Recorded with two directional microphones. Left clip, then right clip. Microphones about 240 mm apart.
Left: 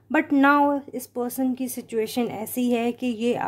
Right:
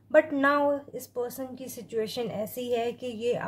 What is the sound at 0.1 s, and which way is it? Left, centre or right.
Speech, left.